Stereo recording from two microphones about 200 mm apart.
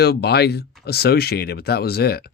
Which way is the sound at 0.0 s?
55° left (ahead or behind).